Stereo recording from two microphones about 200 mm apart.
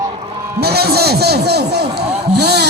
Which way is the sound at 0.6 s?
55° right (ahead or behind).